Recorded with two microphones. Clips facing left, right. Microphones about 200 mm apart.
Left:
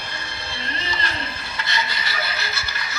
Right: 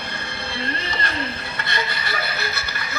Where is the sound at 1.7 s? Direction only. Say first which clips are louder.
Right 2 dB; 60° right (ahead or behind).